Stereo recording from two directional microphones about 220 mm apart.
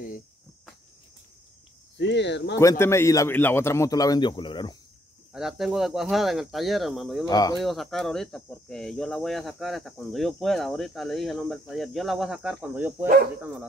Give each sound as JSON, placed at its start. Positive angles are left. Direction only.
{"t": 2.0, "sound": "speech", "side_deg": 50}
{"t": 2.8, "sound": "a man's voice", "side_deg": 10}
{"t": 5.3, "sound": "speech", "side_deg": 0}
{"t": 7.2, "sound": "a man's voice", "side_deg": 15}
{"t": 7.5, "sound": "speech", "side_deg": 0}